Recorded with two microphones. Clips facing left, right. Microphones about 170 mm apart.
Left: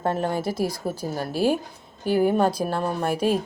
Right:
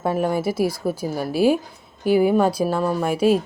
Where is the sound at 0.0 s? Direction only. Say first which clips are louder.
Right 3 dB; 10° right (ahead or behind).